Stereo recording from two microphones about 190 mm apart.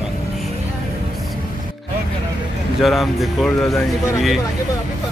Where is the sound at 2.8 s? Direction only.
Centre (ahead or behind).